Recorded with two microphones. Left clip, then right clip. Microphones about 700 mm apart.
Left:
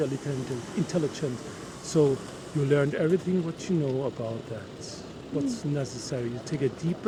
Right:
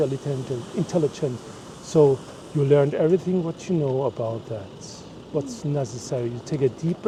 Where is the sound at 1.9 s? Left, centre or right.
Centre.